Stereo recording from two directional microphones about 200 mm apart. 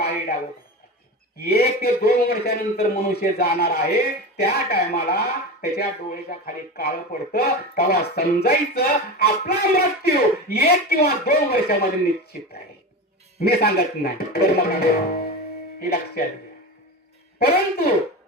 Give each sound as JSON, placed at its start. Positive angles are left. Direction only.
{"t": 0.0, "sound": "a sound", "side_deg": 55}
{"t": 1.4, "sound": "speech", "side_deg": 50}
{"t": 17.4, "sound": "speech", "side_deg": 50}